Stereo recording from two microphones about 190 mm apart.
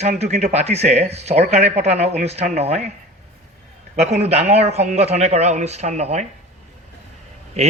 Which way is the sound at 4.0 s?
35° right (ahead or behind).